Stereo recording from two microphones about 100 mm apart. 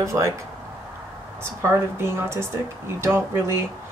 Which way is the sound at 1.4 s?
25° right (ahead or behind).